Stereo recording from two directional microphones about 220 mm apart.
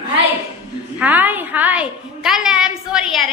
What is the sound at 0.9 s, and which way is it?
A woman's voice, 5° right (ahead or behind).